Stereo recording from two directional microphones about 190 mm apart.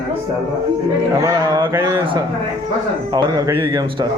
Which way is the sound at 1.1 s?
15° right (ahead or behind).